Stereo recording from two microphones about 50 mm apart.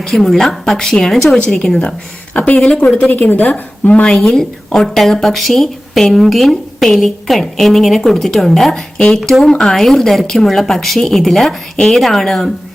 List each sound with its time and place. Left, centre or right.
0.0 s speech: centre
2.3 s a woman's voice: left
2.6 s speech: centre
3.1 s a woman's voice: left
4.0 s a woman's voice: centre